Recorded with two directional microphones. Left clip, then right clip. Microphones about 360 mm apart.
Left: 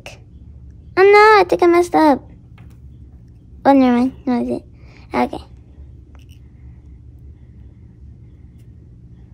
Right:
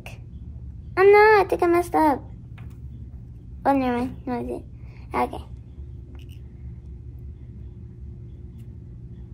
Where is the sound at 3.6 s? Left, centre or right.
Left.